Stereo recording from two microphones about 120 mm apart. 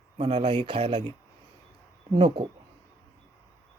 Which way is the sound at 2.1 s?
45° right (ahead or behind).